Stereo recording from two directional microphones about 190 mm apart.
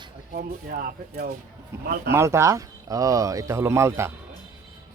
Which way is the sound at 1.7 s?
15° right (ahead or behind).